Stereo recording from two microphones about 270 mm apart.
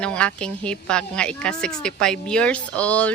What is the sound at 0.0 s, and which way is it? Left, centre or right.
A woman's voice, centre.